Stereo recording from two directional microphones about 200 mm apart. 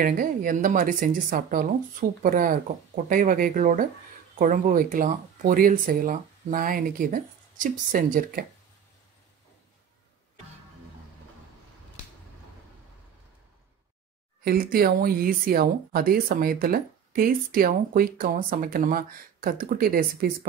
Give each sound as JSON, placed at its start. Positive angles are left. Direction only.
{"t": 0.0, "sound": "speech", "side_deg": -45}
{"t": 14.4, "sound": "speech", "side_deg": -50}